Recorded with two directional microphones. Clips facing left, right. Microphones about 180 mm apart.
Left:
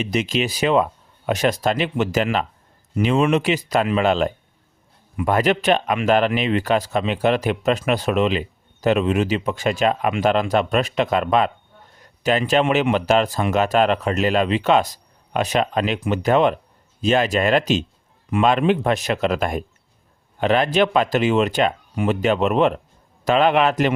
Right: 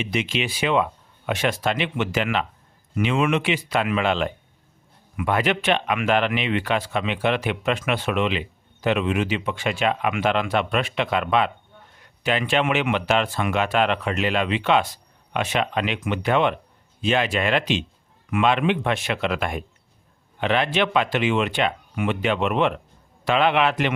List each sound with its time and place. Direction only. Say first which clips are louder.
0.0 s speech: left 4 dB; 40° left (ahead or behind)